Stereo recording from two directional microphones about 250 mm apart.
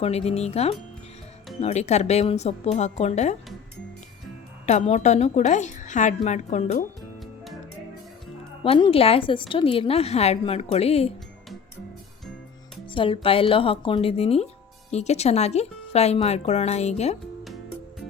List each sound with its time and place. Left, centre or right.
0.0 s a woman's voice: left
4.6 s a woman's voice: left
8.6 s a woman's voice: left
12.9 s a woman's voice: left